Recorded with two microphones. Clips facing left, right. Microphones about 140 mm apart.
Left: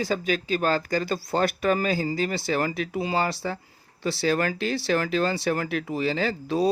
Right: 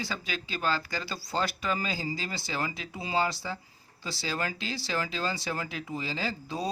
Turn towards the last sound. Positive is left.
turn(degrees=65)  # may be behind; listen again after turning